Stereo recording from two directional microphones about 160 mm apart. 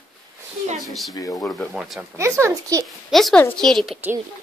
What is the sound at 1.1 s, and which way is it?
Speech, 20° left (ahead or behind).